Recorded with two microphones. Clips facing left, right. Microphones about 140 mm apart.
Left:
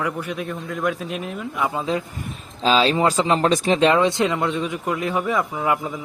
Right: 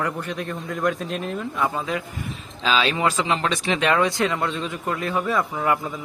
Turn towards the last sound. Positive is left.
turn(degrees=15)  # may be behind; listen again after turning